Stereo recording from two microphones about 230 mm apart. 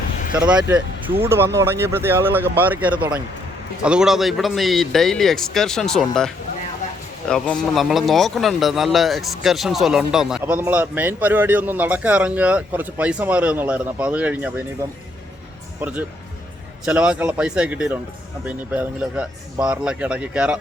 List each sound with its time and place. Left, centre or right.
0.3 s speech: centre
16.8 s speech: centre